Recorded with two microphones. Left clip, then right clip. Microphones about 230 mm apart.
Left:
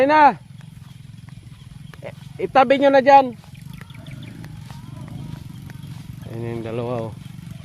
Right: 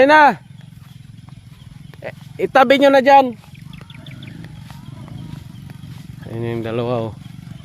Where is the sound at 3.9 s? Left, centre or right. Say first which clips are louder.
Right 5 dB; right.